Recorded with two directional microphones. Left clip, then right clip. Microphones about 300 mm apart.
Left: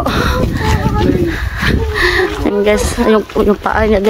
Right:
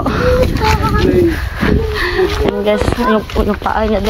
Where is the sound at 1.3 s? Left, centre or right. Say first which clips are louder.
Even; centre.